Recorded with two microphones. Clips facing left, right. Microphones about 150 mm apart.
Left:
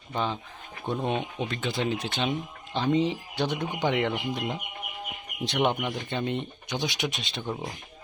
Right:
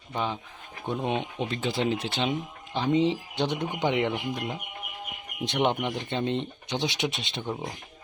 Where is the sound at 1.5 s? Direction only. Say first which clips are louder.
Right 3 dB; 30° right (ahead or behind).